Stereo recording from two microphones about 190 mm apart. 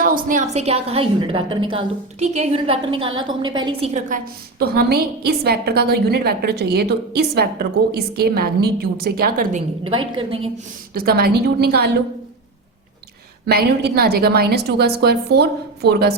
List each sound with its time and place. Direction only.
0.0 s a woman's voice: 45° right (ahead or behind)
4.6 s a woman's voice: 55° right (ahead or behind); by 10.5 s 30° right (ahead or behind)
10.9 s a woman's voice: 55° right (ahead or behind)
13.5 s a woman's voice: 55° right (ahead or behind)